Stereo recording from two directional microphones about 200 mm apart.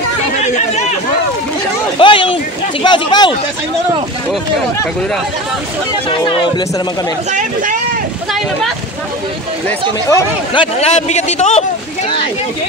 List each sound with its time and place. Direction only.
2.0 s speech: 25° left (ahead or behind)
6.0 s speech: 25° left (ahead or behind)
9.7 s speech: 15° left (ahead or behind)
10.5 s a man's voice: 25° left (ahead or behind)